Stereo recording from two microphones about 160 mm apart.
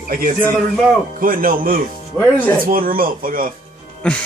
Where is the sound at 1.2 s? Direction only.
60° right (ahead or behind).